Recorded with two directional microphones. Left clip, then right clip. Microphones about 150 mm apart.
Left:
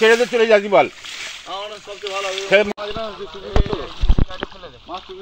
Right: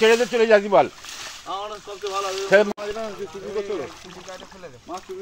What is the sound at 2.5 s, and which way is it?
Speech, 45° left (ahead or behind).